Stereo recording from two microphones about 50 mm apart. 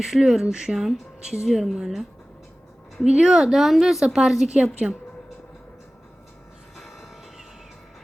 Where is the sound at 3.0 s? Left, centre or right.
Centre.